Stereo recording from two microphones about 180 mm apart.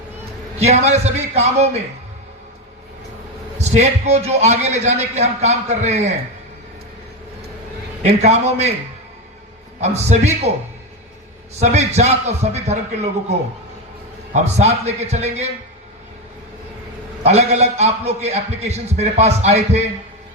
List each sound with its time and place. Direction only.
0.6 s a man's voice: 35° right (ahead or behind)
3.6 s a man's voice: 40° right (ahead or behind)
8.2 s a man's voice: 35° right (ahead or behind)
9.8 s a man's voice: 35° right (ahead or behind)
11.6 s a man's voice: 40° right (ahead or behind)
14.3 s a man's voice: 35° right (ahead or behind)
17.2 s a man's voice: 35° right (ahead or behind)